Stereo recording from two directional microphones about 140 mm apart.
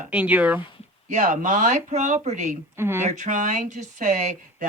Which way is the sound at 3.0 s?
60° right (ahead or behind).